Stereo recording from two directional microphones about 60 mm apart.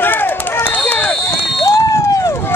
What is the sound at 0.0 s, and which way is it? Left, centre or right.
Run, left.